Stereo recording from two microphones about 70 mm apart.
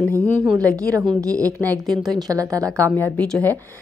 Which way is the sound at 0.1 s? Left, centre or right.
Right.